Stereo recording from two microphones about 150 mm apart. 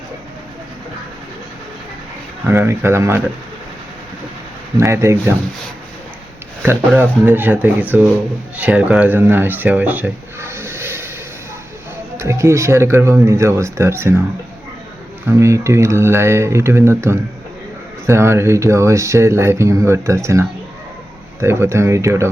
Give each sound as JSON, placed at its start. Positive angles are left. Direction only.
{"t": 2.5, "sound": "speech", "side_deg": -15}
{"t": 4.8, "sound": "speech", "side_deg": -20}
{"t": 6.6, "sound": "speech", "side_deg": -10}
{"t": 12.1, "sound": "speech", "side_deg": -20}
{"t": 15.3, "sound": "speech", "side_deg": -20}
{"t": 21.4, "sound": "speech", "side_deg": -15}